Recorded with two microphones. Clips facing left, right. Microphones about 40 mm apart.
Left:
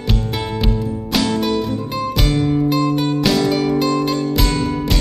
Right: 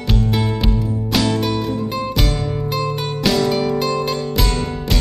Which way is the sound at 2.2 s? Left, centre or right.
Left.